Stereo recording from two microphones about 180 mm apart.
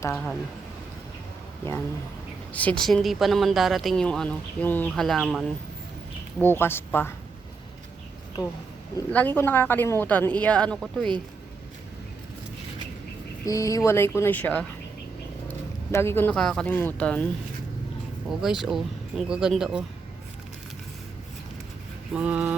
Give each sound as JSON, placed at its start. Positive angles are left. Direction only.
{"t": 0.0, "sound": "a woman's voice", "side_deg": 10}
{"t": 2.5, "sound": "speech", "side_deg": 10}
{"t": 6.4, "sound": "a woman's voice", "side_deg": 10}
{"t": 8.4, "sound": "speech", "side_deg": 20}
{"t": 9.0, "sound": "a woman's voice", "side_deg": 10}
{"t": 13.4, "sound": "a woman's voice", "side_deg": 20}
{"t": 18.3, "sound": "speech", "side_deg": 0}
{"t": 22.1, "sound": "vehicle", "side_deg": -5}